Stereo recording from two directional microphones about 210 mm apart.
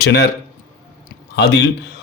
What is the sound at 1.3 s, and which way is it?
Speech, 50° left (ahead or behind).